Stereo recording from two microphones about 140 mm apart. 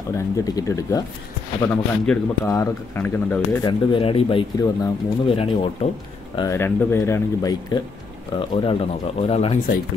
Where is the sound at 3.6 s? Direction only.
35° left (ahead or behind).